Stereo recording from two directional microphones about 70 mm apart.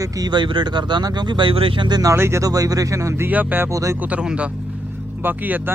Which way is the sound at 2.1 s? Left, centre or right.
Right.